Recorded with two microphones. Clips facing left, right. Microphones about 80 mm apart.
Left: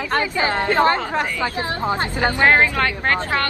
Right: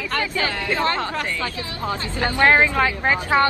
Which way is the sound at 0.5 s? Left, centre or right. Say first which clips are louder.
Left 6 dB; left.